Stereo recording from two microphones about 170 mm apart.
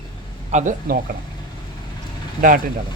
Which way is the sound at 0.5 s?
45° right (ahead or behind).